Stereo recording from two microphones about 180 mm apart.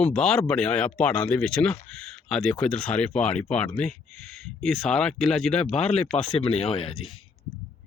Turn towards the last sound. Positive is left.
turn(degrees=30)  # may be behind; listen again after turning